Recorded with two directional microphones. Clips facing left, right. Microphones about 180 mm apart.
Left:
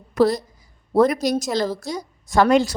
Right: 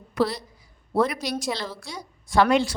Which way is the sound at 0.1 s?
45° left (ahead or behind).